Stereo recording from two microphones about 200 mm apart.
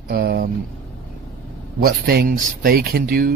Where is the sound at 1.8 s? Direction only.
45° right (ahead or behind).